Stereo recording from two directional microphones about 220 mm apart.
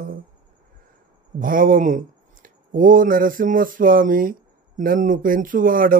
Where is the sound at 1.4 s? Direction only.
40° right (ahead or behind).